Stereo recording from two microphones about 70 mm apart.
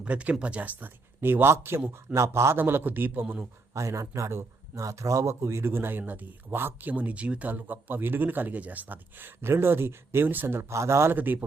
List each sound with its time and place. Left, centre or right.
0.0 s speech: centre; by 2.6 s right
2.6 s speech: right
3.8 s speech: right
11.1 s speech: right